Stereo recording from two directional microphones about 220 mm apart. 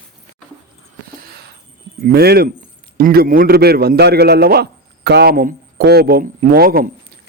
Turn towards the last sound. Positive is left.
turn(degrees=-40)  # may be behind; listen again after turning